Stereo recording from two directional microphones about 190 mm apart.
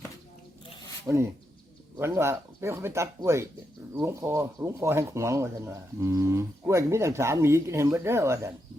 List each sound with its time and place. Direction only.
1.1 s speech: 20° right (ahead or behind)